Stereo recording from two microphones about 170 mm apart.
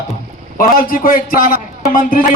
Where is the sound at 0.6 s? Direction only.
55° left (ahead or behind).